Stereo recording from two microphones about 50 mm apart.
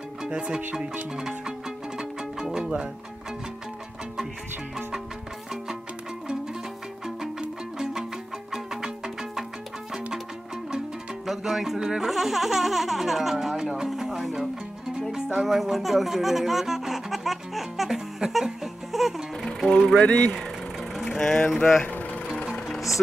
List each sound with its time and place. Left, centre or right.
0.2 s speech: centre
1.1 s music: centre
7.2 s music: centre
11.2 s speech: centre
15.0 s music: centre
20.0 s speech: left
21.1 s vehicle: centre
21.5 s speech: centre
21.8 s music: left